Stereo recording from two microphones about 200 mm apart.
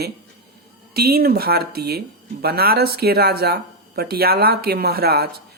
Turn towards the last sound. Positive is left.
turn(degrees=-50)  # may be behind; listen again after turning